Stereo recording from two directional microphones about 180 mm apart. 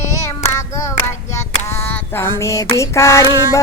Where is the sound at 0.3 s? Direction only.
15° left (ahead or behind).